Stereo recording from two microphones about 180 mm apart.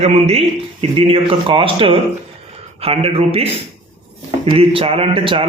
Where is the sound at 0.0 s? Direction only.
35° right (ahead or behind).